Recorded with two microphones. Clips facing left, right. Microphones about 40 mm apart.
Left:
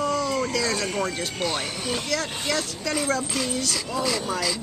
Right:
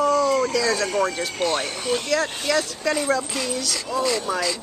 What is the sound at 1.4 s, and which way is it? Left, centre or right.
Speech, centre.